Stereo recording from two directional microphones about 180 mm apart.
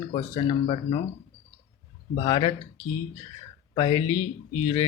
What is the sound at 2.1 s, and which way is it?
Speech, 30° left (ahead or behind).